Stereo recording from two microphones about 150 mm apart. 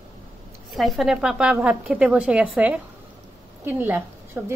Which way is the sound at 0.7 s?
Centre (ahead or behind).